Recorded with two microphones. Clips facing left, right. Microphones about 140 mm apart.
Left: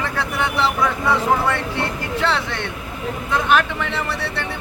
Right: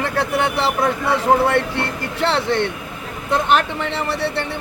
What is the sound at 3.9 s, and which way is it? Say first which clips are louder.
Speech: right 3 dB; 30° right (ahead or behind).